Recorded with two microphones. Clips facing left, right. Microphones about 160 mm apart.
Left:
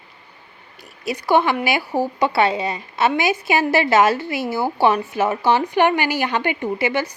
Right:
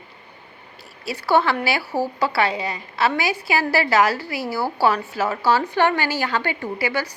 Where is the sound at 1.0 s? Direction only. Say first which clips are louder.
Left 2 dB; 15° left (ahead or behind).